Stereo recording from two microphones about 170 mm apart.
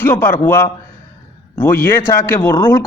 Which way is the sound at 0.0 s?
10° left (ahead or behind).